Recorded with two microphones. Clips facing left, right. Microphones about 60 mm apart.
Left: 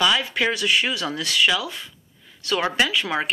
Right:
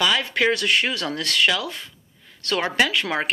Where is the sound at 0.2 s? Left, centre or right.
Right.